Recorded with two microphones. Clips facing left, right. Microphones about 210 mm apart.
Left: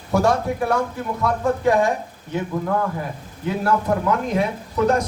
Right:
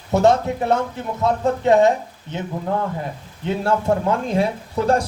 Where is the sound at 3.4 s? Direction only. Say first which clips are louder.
Right 1 dB; 30° right (ahead or behind).